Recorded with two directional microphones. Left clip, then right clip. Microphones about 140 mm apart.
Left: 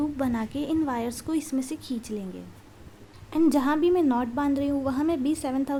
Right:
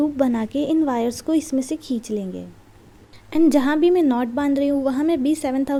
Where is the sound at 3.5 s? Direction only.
25° right (ahead or behind).